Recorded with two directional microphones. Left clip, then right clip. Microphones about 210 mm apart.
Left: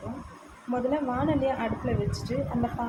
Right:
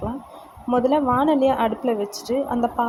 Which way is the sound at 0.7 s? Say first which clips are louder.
Right 9 dB; 35° right (ahead or behind).